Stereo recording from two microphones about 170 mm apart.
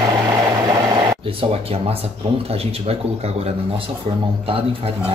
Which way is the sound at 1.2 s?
35° right (ahead or behind).